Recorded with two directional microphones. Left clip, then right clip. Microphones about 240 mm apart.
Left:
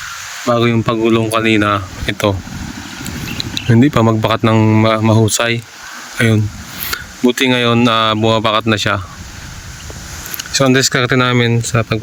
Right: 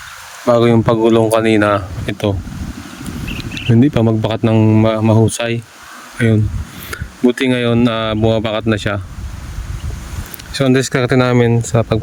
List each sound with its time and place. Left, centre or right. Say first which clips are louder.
0.4 s speech: right 3 dB; right
2.0 s speech: left 5 dB; centre
3.3 s a sound: left 1 dB; centre
4.2 s speech: left 2 dB; centre
10.3 s speech: left 2 dB; centre